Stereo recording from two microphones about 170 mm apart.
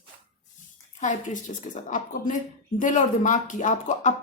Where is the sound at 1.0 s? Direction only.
45° left (ahead or behind).